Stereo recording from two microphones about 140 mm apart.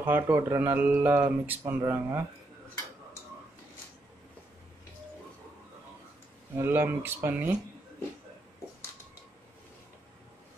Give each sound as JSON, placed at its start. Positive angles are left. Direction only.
{"t": 0.0, "sound": "speech", "side_deg": -15}
{"t": 6.5, "sound": "speech", "side_deg": -15}